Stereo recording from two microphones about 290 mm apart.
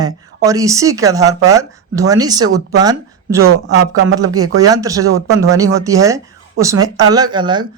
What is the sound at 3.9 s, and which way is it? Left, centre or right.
Speech, right.